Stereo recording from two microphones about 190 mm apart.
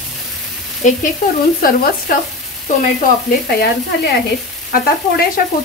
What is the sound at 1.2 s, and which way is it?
Speech, 50° left (ahead or behind).